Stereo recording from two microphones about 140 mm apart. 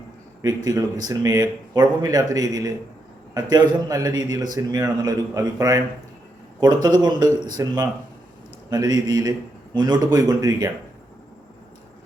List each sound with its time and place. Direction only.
0.4 s speech: 25° right (ahead or behind)